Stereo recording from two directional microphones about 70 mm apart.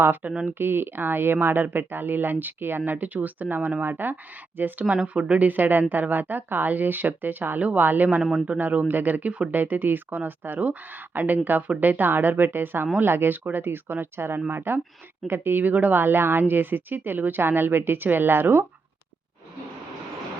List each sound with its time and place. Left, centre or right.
0.0 s speech: right